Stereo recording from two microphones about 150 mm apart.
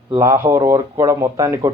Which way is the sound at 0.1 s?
25° right (ahead or behind).